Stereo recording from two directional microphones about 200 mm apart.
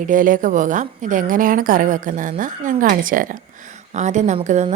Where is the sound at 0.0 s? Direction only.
40° right (ahead or behind).